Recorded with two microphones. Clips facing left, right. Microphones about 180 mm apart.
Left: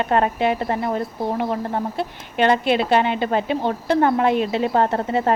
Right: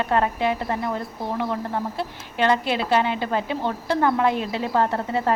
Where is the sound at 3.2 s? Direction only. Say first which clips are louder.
Left 4 dB; 20° left (ahead or behind).